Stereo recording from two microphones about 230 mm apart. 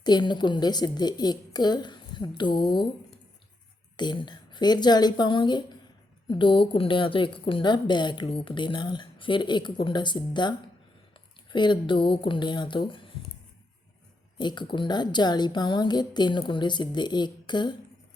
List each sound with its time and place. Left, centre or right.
0.0 s a woman's voice: centre
3.9 s a woman's voice: centre
11.5 s a woman's voice: centre
14.3 s a woman's voice: centre